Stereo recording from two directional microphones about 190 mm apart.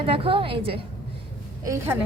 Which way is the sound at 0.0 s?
30° right (ahead or behind).